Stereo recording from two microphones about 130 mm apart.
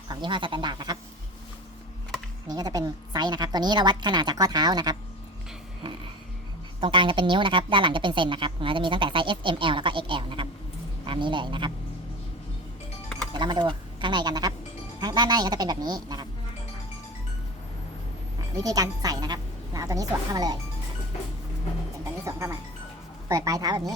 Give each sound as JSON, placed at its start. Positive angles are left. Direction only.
{"t": 0.1, "sound": "a woman's voice", "side_deg": -35}
{"t": 2.5, "sound": "a woman's voice", "side_deg": -30}
{"t": 6.7, "sound": "a woman's voice", "side_deg": -40}
{"t": 13.3, "sound": "a woman's voice", "side_deg": -35}
{"t": 18.3, "sound": "a woman's voice", "side_deg": -30}
{"t": 22.2, "sound": "speech", "side_deg": -20}